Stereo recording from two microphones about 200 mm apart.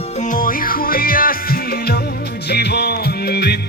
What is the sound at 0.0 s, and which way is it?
Music, 35° left (ahead or behind).